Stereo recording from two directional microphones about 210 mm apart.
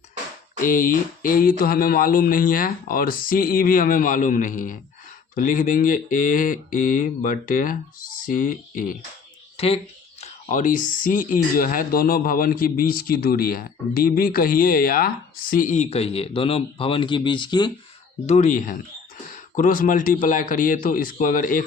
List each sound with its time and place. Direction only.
0.6 s speech: 40° left (ahead or behind)
9.6 s speech: 30° left (ahead or behind)
18.3 s speech: 35° left (ahead or behind)